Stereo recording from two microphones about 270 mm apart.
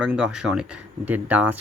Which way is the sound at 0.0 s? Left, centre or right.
Centre.